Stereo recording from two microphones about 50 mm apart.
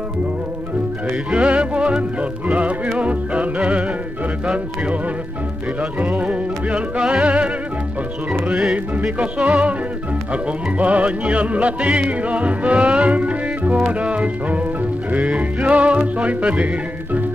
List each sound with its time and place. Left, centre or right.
1.3 s music: right
5.8 s music: right
6.2 s music: centre
9.2 s music: right